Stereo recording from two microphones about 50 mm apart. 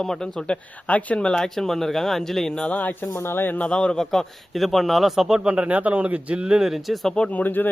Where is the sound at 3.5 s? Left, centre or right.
Left.